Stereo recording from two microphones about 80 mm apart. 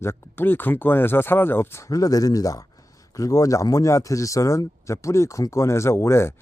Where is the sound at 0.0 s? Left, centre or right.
Left.